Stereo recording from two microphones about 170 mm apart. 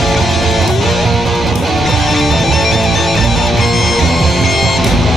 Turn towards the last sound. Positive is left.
turn(degrees=0)  # may be behind; listen again after turning